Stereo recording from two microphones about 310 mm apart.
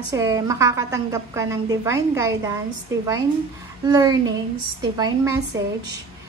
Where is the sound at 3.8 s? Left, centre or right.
Centre.